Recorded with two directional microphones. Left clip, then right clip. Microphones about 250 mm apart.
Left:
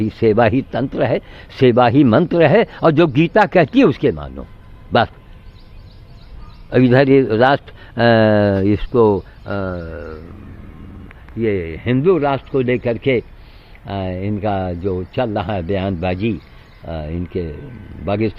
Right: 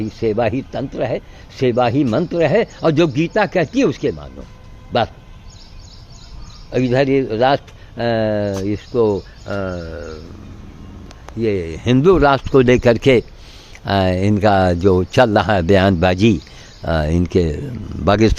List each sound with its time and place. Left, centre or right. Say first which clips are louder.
0.0 s a man's voice: left 4 dB; left
6.7 s a man's voice: left 4 dB; left
9.6 s bird: even; centre
11.3 s speech: even; centre; by 18.3 s right